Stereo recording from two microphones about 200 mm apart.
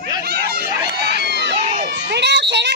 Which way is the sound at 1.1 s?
60° right (ahead or behind).